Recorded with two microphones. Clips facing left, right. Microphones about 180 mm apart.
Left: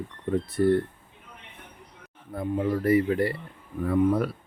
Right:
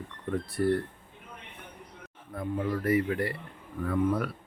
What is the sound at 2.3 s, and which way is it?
Speech, 30° left (ahead or behind).